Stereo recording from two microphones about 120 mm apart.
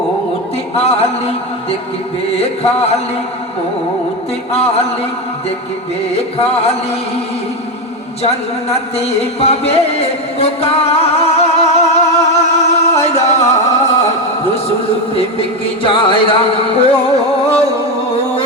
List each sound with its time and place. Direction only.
0.7 s speech: 60° left (ahead or behind)
2.3 s music: 60° left (ahead or behind)
4.5 s speech: 60° left (ahead or behind)
6.1 s speech: 60° left (ahead or behind)
8.7 s music: 60° left (ahead or behind)
15.1 s a man's voice: 50° left (ahead or behind)